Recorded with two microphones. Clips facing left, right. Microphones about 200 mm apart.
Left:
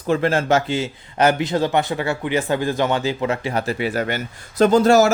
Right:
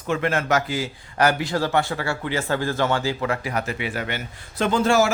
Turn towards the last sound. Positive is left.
turn(degrees=40)  # may be behind; listen again after turning